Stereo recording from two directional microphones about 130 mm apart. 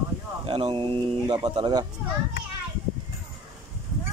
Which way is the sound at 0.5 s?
40° right (ahead or behind).